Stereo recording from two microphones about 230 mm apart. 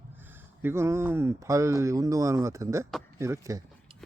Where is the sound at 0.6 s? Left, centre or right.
Centre.